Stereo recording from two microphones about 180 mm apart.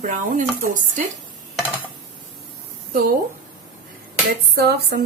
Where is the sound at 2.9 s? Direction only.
55° right (ahead or behind).